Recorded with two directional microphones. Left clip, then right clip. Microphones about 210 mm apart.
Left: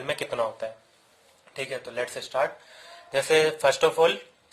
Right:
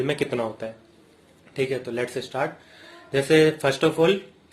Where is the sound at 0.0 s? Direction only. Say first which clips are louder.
Right 3 dB; 25° left (ahead or behind).